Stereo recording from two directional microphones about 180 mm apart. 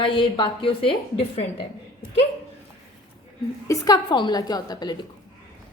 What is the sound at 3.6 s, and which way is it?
A woman's voice, 20° left (ahead or behind).